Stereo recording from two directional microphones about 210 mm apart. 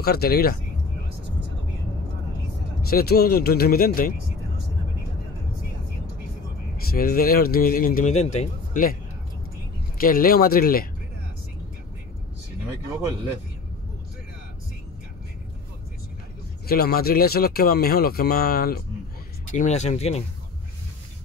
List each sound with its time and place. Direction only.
0.0 s speech: 50° left (ahead or behind)
2.9 s speech: 45° left (ahead or behind)
6.9 s speech: 45° left (ahead or behind)
9.9 s speech: 45° left (ahead or behind)
16.6 s speech: 45° left (ahead or behind)
19.5 s speech: 35° left (ahead or behind)